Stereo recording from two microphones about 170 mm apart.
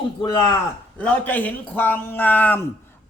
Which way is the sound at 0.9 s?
10° left (ahead or behind).